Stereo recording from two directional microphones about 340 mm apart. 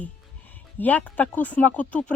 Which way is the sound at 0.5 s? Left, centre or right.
Centre.